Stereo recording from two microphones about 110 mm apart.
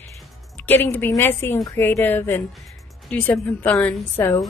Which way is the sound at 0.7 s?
20° left (ahead or behind).